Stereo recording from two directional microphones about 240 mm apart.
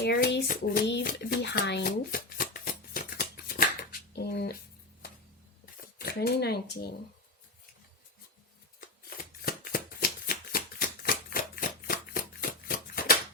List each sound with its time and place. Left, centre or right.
0.0 s hands: left
4.1 s a sound: left
6.0 s speech: left
8.8 s shuffling cards: left